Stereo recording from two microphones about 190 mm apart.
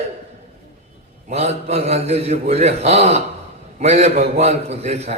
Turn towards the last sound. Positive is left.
turn(degrees=-35)  # may be behind; listen again after turning